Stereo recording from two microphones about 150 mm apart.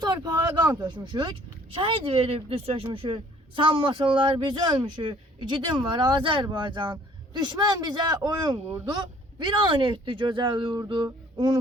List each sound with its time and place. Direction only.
0.0 s speech: 30° right (ahead or behind)